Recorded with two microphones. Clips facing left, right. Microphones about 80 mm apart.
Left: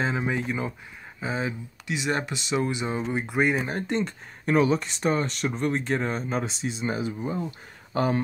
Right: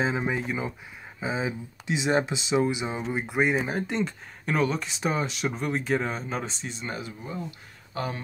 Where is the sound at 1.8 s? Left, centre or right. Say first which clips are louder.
Right 3 dB; right.